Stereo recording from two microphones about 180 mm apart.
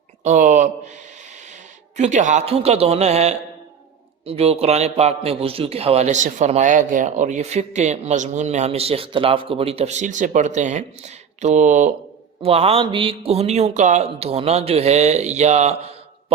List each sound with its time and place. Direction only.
0.3 s speech: 45° right (ahead or behind)
2.0 s a man's voice: 40° right (ahead or behind)
12.4 s a man's voice: 35° right (ahead or behind)